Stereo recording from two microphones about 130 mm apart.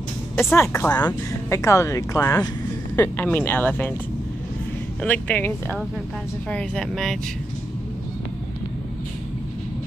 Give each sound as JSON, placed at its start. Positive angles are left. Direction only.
{"t": 0.4, "sound": "speech", "side_deg": 20}
{"t": 3.0, "sound": "speech", "side_deg": 15}
{"t": 5.0, "sound": "speech", "side_deg": 10}